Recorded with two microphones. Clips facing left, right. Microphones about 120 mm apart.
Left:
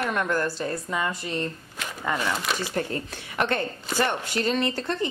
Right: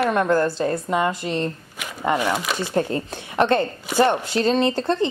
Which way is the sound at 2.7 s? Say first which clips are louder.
Right 6 dB; 30° right (ahead or behind).